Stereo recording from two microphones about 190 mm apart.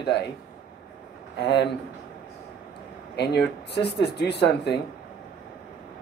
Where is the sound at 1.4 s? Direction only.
60° left (ahead or behind).